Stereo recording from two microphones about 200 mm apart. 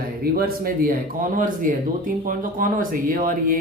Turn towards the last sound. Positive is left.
turn(degrees=-45)  # may be behind; listen again after turning